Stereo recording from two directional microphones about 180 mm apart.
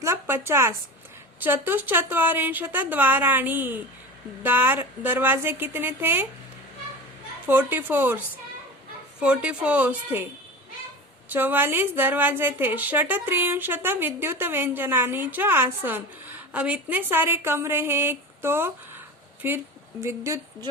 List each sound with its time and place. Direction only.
0.0 s a sound: 15° right (ahead or behind)
1.4 s a woman's voice: 10° right (ahead or behind)
7.4 s a woman's voice: 10° right (ahead or behind)
9.2 s a woman's voice: 5° right (ahead or behind)
11.3 s a woman's voice: 10° right (ahead or behind)